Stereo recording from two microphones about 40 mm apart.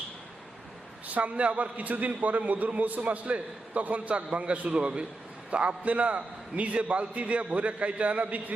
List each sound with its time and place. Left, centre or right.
1.0 s a man's voice: right